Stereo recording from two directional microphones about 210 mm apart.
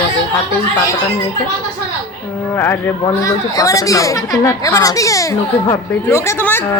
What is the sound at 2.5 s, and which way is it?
Speech, 10° left (ahead or behind).